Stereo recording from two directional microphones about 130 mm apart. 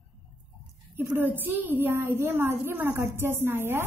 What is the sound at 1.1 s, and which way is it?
A woman's voice, 15° right (ahead or behind).